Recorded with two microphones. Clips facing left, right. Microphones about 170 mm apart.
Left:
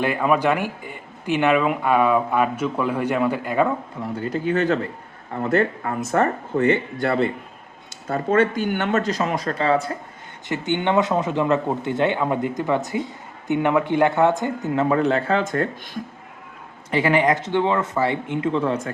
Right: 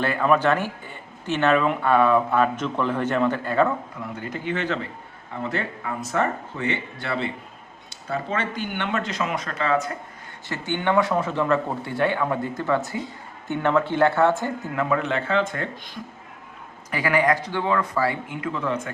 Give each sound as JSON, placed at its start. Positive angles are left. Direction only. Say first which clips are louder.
{"t": 0.0, "sound": "speech", "louder": "left 1 dB", "side_deg": 15}
{"t": 4.0, "sound": "speech", "louder": "left 9 dB", "side_deg": 35}
{"t": 10.5, "sound": "speech", "louder": "left 2 dB", "side_deg": 20}
{"t": 14.8, "sound": "speech", "louder": "left 5 dB", "side_deg": 35}
{"t": 16.9, "sound": "speech", "louder": "left 3 dB", "side_deg": 25}